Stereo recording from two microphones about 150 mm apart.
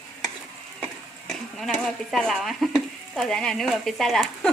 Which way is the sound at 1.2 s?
5° left (ahead or behind).